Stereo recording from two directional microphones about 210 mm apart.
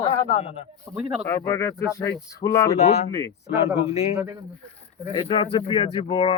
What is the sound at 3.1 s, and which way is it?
Speech, 15° left (ahead or behind).